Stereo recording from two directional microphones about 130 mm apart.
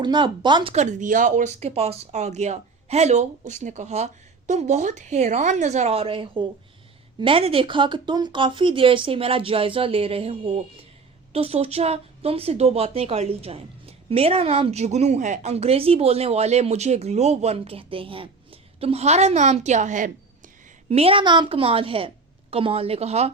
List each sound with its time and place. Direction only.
0.0 s speech: 35° right (ahead or behind)
0.7 s speech: 65° right (ahead or behind)
20.9 s speech: 45° right (ahead or behind)